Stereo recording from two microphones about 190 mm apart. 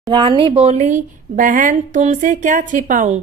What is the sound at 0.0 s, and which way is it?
Speech, 25° right (ahead or behind).